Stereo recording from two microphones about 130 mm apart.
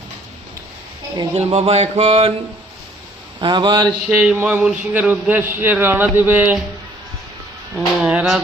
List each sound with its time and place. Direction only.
1.1 s a sound: 45° right (ahead or behind)
3.4 s speech: 40° right (ahead or behind)
3.8 s mantra: 5° right (ahead or behind)
4.4 s speech: 15° right (ahead or behind)
8.0 s speech: 5° right (ahead or behind)